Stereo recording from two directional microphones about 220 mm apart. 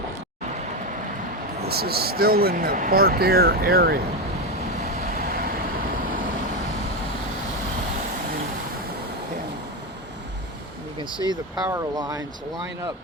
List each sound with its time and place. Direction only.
1.6 s speech: 45° right (ahead or behind)
5.1 s vehicle: 40° right (ahead or behind)
11.5 s speech: 5° right (ahead or behind)